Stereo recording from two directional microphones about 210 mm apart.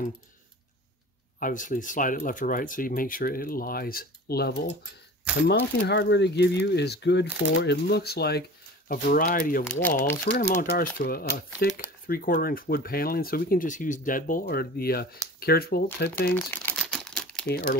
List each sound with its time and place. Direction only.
1.4 s speech: 40° left (ahead or behind)
9.7 s speech: 10° left (ahead or behind)
10.5 s speech: 40° left (ahead or behind)
16.3 s crumpling: 10° left (ahead or behind)
17.5 s speech: 50° left (ahead or behind)